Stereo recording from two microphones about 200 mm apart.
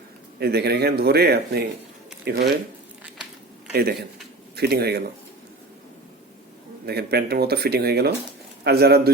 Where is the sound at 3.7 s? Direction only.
50° right (ahead or behind).